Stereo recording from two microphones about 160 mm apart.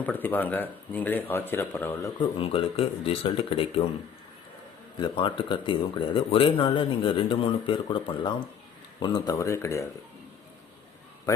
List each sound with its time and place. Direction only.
0.0 s speech: 10° left (ahead or behind)
2.4 s speech: 35° left (ahead or behind)
4.9 s speech: 30° left (ahead or behind)